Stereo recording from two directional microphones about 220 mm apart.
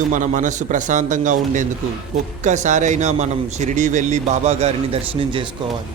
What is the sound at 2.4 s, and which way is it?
A man's voice, 35° right (ahead or behind).